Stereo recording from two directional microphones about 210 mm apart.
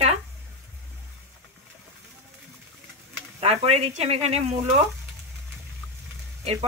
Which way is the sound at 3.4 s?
30° right (ahead or behind).